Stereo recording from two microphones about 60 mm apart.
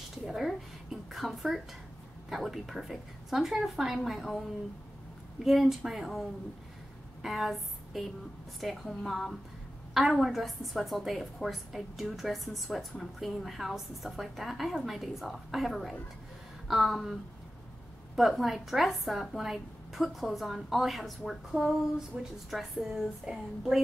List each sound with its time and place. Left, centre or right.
0.3 s speech: centre
5.4 s a woman's voice: centre
22.1 s a woman's voice: centre
22.5 s a woman's voice: centre